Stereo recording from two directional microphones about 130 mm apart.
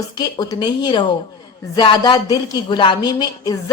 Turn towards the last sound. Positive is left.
turn(degrees=35)  # may be behind; listen again after turning